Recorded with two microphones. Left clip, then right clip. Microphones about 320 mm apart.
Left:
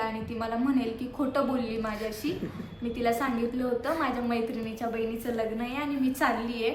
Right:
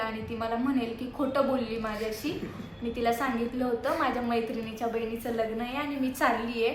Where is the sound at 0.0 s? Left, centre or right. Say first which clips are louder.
Even; centre.